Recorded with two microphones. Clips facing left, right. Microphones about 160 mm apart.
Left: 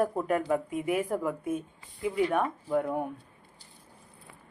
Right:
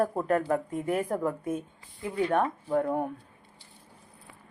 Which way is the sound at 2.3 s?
30° right (ahead or behind).